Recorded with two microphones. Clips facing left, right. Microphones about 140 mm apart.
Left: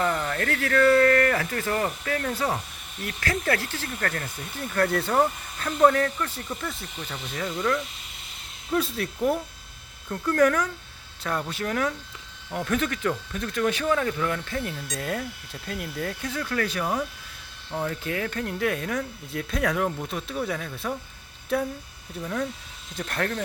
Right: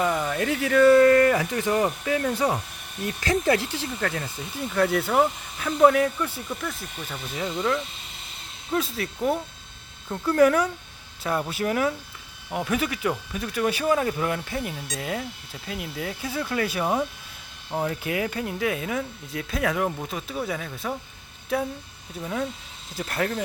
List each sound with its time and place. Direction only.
0.0 s speech: 10° right (ahead or behind)
7.4 s speech: 20° right (ahead or behind)
8.7 s speech: centre (ahead or behind)
10.1 s speech: 10° right (ahead or behind)